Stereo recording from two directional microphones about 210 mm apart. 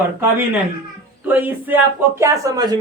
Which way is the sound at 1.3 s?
10° right (ahead or behind).